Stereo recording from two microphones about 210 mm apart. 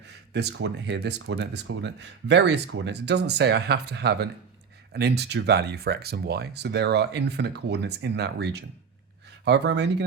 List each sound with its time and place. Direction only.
0.3 s speech: 55° right (ahead or behind)